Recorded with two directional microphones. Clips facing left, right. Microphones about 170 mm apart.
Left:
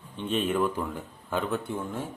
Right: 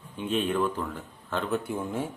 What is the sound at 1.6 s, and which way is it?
Speech, 10° right (ahead or behind).